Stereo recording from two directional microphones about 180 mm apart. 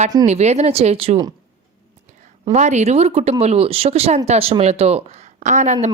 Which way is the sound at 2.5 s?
40° right (ahead or behind).